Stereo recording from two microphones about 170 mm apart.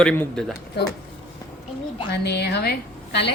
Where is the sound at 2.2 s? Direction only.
75° left (ahead or behind).